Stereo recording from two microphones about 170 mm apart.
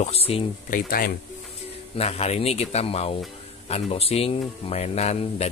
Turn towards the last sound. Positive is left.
turn(degrees=40)  # may be behind; listen again after turning